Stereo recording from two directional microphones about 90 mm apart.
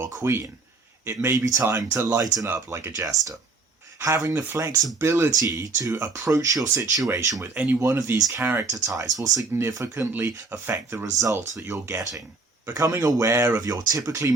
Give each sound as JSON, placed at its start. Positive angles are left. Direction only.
{"t": 0.0, "sound": "speech", "side_deg": -30}
{"t": 2.0, "sound": "speech", "side_deg": -40}
{"t": 2.5, "sound": "speech", "side_deg": -30}
{"t": 7.5, "sound": "speech", "side_deg": -15}
{"t": 7.8, "sound": "speech", "side_deg": -30}
{"t": 8.7, "sound": "speech", "side_deg": -40}
{"t": 9.6, "sound": "speech", "side_deg": -30}